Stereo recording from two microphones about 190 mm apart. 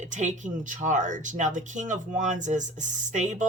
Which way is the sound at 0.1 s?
40° right (ahead or behind).